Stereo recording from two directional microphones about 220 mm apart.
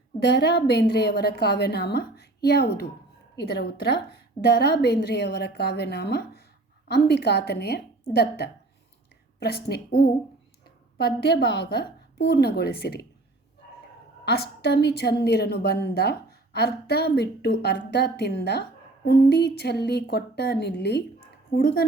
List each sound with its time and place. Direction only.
0.2 s a woman's voice: 50° left (ahead or behind)
14.3 s a woman's voice: 45° left (ahead or behind)